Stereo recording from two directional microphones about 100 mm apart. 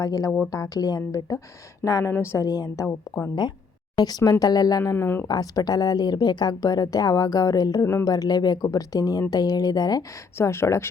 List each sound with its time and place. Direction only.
0.0 s a woman's voice: 35° left (ahead or behind)
2.5 s a woman's voice: 40° left (ahead or behind)
3.9 s a woman's voice: 40° left (ahead or behind)
4.8 s a woman's voice: 25° left (ahead or behind)
5.3 s a woman's voice: 40° left (ahead or behind)
7.9 s a woman's voice: 25° left (ahead or behind)
8.1 s a woman's voice: 40° left (ahead or behind)
10.3 s a woman's voice: 25° left (ahead or behind)